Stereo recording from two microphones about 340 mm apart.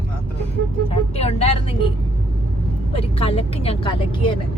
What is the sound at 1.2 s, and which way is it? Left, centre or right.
Speech, centre.